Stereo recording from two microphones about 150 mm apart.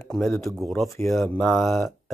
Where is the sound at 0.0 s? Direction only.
5° left (ahead or behind).